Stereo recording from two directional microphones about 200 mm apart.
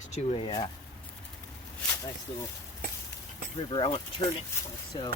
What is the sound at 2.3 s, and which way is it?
Speech, 20° left (ahead or behind).